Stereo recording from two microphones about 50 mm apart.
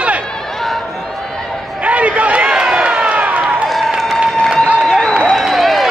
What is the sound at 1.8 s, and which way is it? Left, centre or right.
Run, right.